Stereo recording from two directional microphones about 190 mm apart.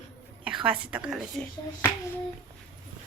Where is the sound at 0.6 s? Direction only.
5° right (ahead or behind).